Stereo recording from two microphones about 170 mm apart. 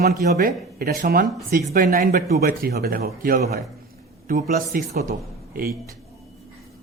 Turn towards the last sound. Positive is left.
turn(degrees=-60)  # may be behind; listen again after turning